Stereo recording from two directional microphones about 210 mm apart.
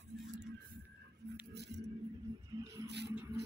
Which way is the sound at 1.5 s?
55° right (ahead or behind).